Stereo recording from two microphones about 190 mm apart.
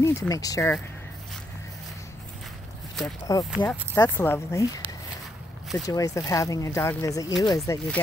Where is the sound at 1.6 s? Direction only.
15° left (ahead or behind).